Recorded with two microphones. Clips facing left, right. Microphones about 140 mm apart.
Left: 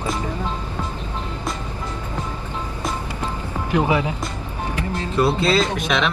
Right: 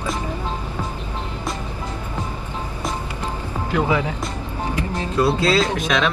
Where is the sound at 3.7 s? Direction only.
20° left (ahead or behind).